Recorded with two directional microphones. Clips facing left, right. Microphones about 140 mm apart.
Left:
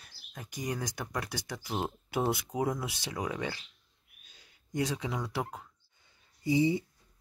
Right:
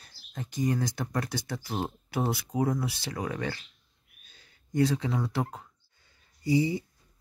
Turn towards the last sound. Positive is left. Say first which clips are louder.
# right 1 dB
turn(degrees=20)  # may be behind; listen again after turning